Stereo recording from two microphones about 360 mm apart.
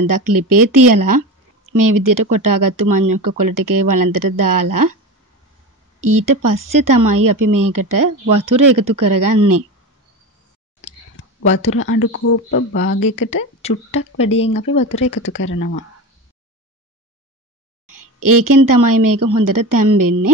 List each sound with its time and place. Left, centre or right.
0.0 s speech: right
5.9 s speech: right
11.7 s speech: left
13.6 s speech: centre
15.3 s speech: left
17.8 s a sound: right
18.7 s speech: right